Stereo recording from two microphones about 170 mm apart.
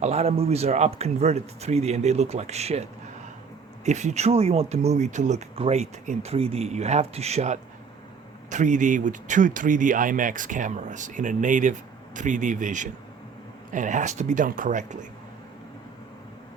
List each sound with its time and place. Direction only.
0.0 s speech: 40° right (ahead or behind)